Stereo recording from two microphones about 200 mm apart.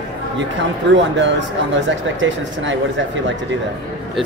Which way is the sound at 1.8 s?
70° right (ahead or behind).